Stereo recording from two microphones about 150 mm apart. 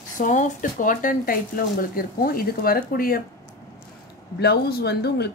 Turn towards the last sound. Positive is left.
turn(degrees=90)